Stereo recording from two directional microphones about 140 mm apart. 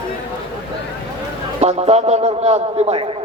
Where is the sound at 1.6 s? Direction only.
50° right (ahead or behind).